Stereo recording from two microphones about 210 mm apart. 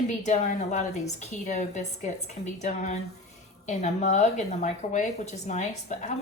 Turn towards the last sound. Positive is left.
turn(degrees=35)  # may be behind; listen again after turning